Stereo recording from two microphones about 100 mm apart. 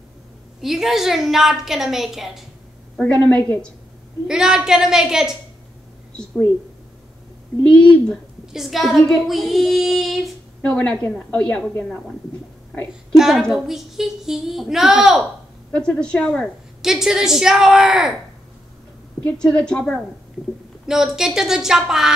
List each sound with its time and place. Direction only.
0.6 s a woman's voice: 5° right (ahead or behind)
3.0 s a woman's voice: 10° left (ahead or behind)
4.3 s a woman's voice: 5° right (ahead or behind)
7.6 s a woman's voice: 10° left (ahead or behind)
8.5 s a woman's voice: centre (ahead or behind)
10.6 s a woman's voice: 10° left (ahead or behind)
13.1 s a woman's voice: 5° right (ahead or behind)
15.7 s a woman's voice: 10° left (ahead or behind)
16.8 s a woman's voice: 5° right (ahead or behind)
19.3 s a woman's voice: 10° left (ahead or behind)
20.8 s a woman's voice: 5° right (ahead or behind)